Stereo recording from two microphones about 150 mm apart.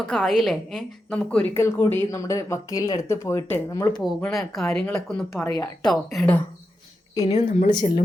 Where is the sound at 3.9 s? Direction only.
5° left (ahead or behind).